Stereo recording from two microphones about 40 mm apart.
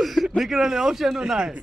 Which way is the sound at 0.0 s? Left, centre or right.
Centre.